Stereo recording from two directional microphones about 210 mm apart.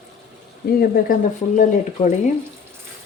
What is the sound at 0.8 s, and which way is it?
Speech, 40° left (ahead or behind).